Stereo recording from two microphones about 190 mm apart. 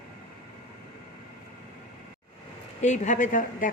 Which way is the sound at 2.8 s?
40° left (ahead or behind).